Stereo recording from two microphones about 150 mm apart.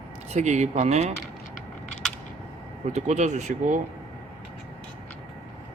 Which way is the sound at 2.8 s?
50° right (ahead or behind).